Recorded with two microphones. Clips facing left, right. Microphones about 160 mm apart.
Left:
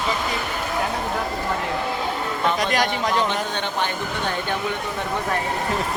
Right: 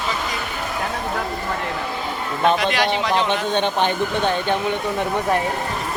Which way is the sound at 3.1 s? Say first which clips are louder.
Right 3 dB; 20° right (ahead or behind).